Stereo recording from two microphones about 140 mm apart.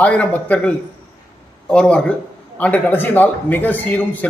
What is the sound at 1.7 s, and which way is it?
A man's voice, 5° left (ahead or behind).